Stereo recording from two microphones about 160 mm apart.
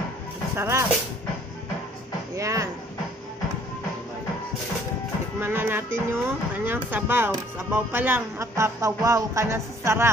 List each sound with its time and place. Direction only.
0.6 s speech: 15° right (ahead or behind)
2.3 s a sound: 20° right (ahead or behind)
5.4 s speech: 15° right (ahead or behind)